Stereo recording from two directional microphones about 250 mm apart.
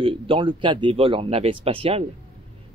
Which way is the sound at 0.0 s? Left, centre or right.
Right.